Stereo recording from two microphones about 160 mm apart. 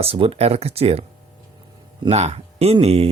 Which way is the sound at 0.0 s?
35° right (ahead or behind).